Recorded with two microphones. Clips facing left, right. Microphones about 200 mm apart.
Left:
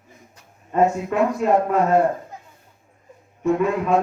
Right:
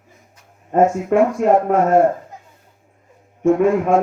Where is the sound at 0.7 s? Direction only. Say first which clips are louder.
Right 5 dB; 45° right (ahead or behind).